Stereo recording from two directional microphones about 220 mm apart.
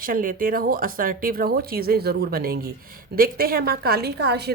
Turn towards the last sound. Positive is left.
turn(degrees=-50)  # may be behind; listen again after turning